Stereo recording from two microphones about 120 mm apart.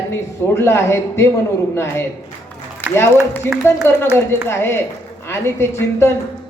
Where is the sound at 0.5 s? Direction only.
20° left (ahead or behind).